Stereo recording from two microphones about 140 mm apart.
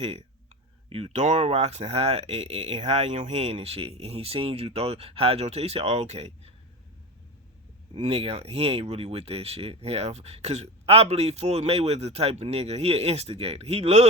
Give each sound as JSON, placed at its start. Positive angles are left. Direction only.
{"t": 0.0, "sound": "speech", "side_deg": -45}
{"t": 7.9, "sound": "speech", "side_deg": -45}